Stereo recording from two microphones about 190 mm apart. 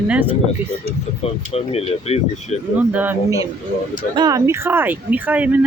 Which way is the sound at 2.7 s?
10° right (ahead or behind).